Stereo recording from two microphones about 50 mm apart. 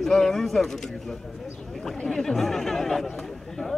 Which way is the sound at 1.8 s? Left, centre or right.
Centre.